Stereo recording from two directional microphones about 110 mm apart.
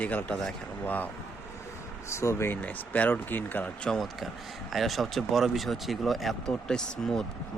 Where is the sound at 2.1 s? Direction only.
25° left (ahead or behind).